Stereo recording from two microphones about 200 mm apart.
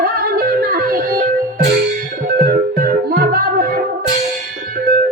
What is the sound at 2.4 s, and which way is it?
Music, 45° right (ahead or behind).